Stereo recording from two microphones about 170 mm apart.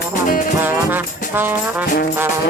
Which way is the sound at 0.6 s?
10° right (ahead or behind).